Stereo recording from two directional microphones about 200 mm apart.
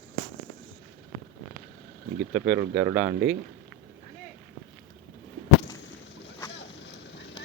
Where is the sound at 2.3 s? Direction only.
10° right (ahead or behind).